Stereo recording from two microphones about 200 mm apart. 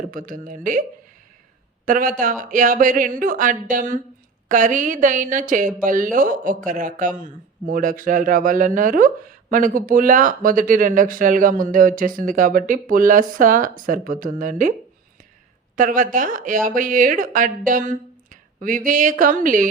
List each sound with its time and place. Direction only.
0.1 s speech: 45° right (ahead or behind)
15.7 s speech: 40° right (ahead or behind)